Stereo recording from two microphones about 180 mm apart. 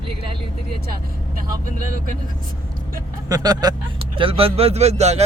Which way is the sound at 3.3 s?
20° right (ahead or behind).